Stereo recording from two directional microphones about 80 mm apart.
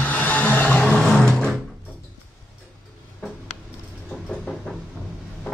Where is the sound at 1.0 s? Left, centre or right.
Centre.